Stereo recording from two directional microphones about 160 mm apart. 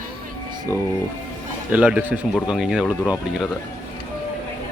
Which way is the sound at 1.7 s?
5° right (ahead or behind).